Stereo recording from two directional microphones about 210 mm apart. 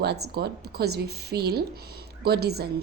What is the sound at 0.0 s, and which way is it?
A woman's voice, 50° right (ahead or behind).